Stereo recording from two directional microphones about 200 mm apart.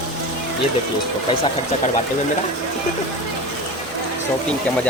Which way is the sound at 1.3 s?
30° left (ahead or behind).